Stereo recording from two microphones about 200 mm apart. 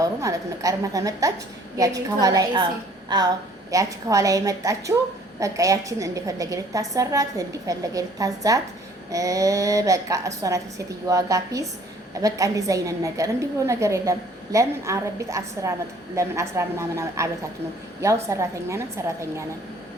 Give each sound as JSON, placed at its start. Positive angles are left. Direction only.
{"t": 0.0, "sound": "a woman's voice", "side_deg": -15}